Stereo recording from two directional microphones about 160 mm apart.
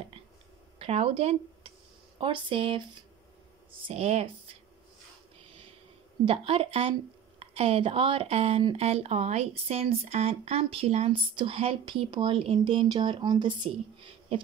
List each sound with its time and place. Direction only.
0.7 s a woman's voice: 40° right (ahead or behind)
6.2 s a woman's voice: 35° right (ahead or behind)